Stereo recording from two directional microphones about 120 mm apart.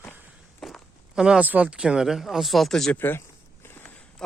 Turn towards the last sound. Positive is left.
turn(degrees=15)  # may be behind; listen again after turning